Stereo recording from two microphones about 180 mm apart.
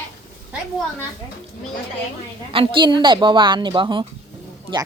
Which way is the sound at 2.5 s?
30° right (ahead or behind).